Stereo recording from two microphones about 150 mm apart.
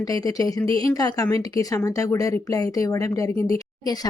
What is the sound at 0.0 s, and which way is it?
A woman's voice, 25° left (ahead or behind).